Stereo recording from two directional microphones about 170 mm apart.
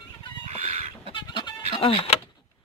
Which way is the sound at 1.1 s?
30° left (ahead or behind).